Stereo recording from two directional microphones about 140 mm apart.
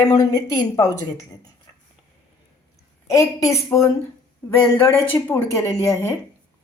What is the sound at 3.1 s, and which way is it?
A woman's voice, 25° left (ahead or behind).